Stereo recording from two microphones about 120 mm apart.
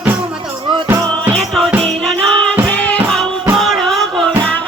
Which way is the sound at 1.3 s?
Centre (ahead or behind).